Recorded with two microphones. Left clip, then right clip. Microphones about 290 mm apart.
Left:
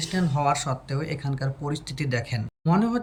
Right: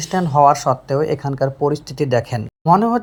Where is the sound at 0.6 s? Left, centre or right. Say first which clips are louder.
Right 14 dB; right.